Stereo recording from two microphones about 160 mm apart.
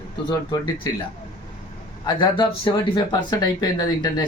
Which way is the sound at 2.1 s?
30° left (ahead or behind).